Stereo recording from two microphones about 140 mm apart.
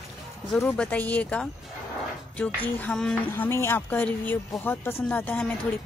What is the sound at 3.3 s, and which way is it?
A woman's voice, 15° left (ahead or behind).